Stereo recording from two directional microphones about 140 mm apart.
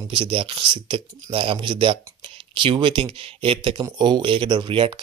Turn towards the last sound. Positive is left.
turn(degrees=-35)  # may be behind; listen again after turning